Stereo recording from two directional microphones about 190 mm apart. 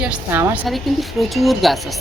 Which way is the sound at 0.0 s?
5° right (ahead or behind).